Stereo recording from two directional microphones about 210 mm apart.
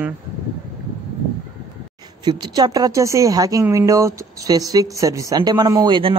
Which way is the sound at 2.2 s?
20° right (ahead or behind).